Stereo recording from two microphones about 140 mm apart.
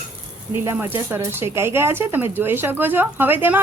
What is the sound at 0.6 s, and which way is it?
Speech, 15° right (ahead or behind).